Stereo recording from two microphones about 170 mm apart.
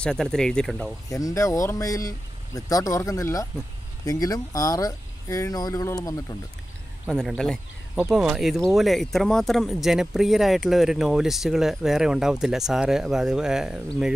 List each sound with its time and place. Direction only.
0.0 s speech: 5° left (ahead or behind)
1.0 s speech: 20° left (ahead or behind)
7.1 s speech: centre (ahead or behind)